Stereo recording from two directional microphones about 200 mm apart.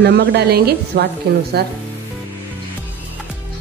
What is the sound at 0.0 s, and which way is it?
A woman's voice, 55° right (ahead or behind).